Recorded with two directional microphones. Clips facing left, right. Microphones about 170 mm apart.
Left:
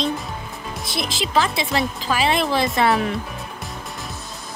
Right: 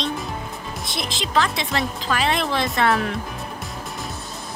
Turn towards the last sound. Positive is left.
turn(degrees=5)  # may be behind; listen again after turning